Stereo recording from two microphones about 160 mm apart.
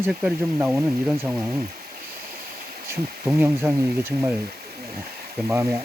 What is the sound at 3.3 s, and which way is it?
Speech, 15° right (ahead or behind).